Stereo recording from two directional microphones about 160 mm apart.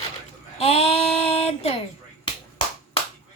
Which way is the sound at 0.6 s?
35° left (ahead or behind).